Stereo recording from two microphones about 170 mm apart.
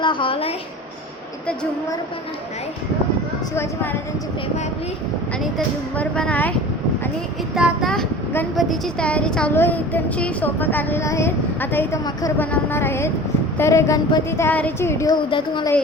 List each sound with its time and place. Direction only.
0.0 s a woman's voice: 30° left (ahead or behind)
3.5 s speech: 15° left (ahead or behind)
5.4 s speech: 5° left (ahead or behind)
7.5 s speech: centre (ahead or behind); by 15.1 s 15° left (ahead or behind)
15.3 s a woman's voice: 30° left (ahead or behind)